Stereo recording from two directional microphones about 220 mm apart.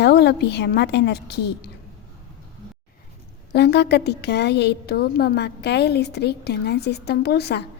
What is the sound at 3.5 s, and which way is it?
A woman's voice, 50° left (ahead or behind).